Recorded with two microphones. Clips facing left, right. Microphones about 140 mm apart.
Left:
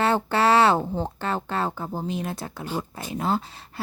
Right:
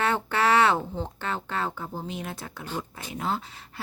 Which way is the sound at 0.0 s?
35° left (ahead or behind).